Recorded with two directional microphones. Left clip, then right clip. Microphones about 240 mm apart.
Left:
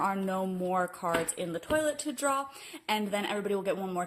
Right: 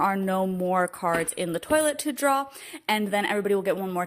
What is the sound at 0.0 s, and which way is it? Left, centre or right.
Speech, right.